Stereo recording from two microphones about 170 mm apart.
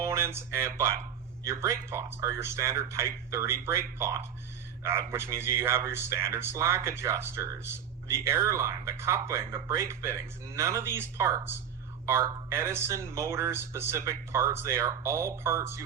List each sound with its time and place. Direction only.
0.0 s a man's voice: 15° right (ahead or behind)